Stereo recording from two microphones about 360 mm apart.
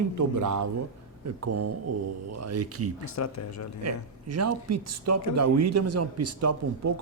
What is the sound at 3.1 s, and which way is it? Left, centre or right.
Speech, left.